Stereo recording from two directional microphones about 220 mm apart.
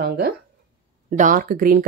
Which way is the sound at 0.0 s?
45° right (ahead or behind).